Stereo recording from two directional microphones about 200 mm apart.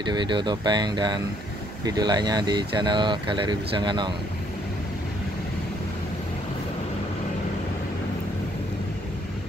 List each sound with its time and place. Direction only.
0.0 s speech: 20° right (ahead or behind)